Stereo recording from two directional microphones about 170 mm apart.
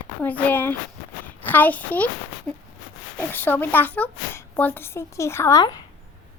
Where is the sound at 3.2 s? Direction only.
10° left (ahead or behind).